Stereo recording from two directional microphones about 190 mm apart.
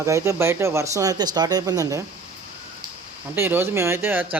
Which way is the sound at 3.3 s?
10° right (ahead or behind).